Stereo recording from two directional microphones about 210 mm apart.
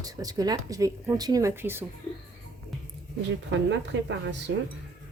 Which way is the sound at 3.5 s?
60° right (ahead or behind).